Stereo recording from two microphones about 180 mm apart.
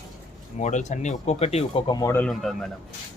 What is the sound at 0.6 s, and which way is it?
Speech, 40° left (ahead or behind).